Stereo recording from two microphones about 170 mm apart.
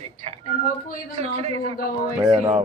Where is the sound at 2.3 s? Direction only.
25° right (ahead or behind).